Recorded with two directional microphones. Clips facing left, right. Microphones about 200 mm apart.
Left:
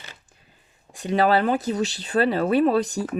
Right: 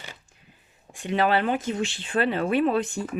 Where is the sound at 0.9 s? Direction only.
40° left (ahead or behind).